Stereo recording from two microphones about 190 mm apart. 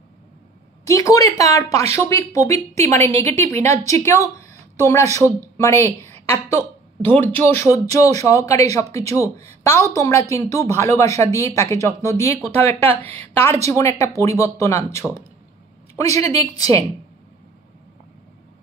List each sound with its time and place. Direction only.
0.8 s a woman's voice: 15° left (ahead or behind)